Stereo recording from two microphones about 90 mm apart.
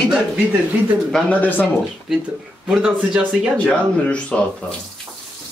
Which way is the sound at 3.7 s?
15° left (ahead or behind).